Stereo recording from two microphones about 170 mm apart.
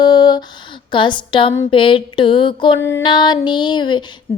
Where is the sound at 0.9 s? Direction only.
30° left (ahead or behind).